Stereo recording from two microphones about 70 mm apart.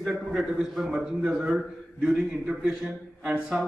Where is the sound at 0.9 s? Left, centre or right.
Centre.